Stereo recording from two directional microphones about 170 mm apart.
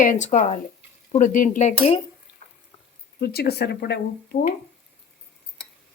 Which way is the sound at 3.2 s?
70° left (ahead or behind).